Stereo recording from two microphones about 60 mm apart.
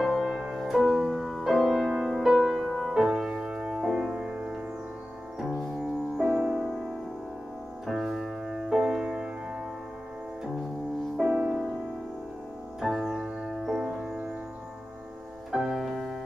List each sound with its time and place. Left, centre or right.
0.0 s music: centre
5.4 s music: centre
6.2 s music: centre
7.8 s music: centre
11.1 s music: centre
12.8 s music: centre
15.5 s music: centre